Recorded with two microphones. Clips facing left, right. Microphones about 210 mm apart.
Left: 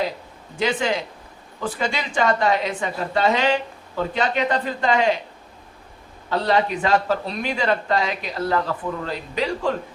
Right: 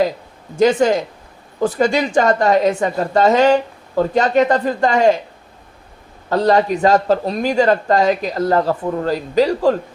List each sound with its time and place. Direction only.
0.5 s speech: 45° right (ahead or behind)
6.2 s speech: 45° right (ahead or behind)